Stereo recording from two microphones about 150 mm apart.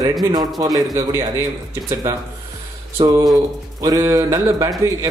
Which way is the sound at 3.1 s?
25° right (ahead or behind).